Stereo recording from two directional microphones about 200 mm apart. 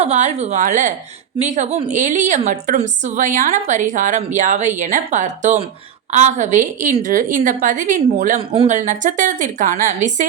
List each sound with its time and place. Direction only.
0.0 s a woman's voice: 35° right (ahead or behind)